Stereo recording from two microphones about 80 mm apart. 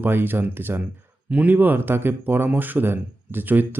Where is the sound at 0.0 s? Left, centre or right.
Right.